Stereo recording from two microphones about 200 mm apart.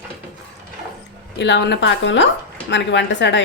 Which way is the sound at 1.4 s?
60° left (ahead or behind).